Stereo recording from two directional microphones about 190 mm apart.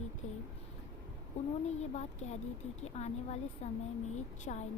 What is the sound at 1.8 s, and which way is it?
A woman's voice, 35° left (ahead or behind).